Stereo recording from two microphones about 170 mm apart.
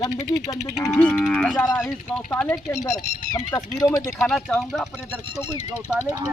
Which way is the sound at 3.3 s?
20° left (ahead or behind).